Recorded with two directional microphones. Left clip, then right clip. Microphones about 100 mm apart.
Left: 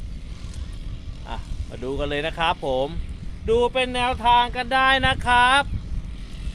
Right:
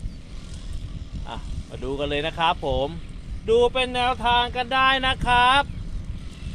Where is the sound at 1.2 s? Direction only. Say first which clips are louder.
Left 1 dB; 25° left (ahead or behind).